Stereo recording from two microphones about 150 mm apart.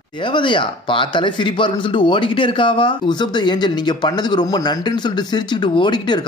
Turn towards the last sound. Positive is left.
turn(degrees=30)  # may be behind; listen again after turning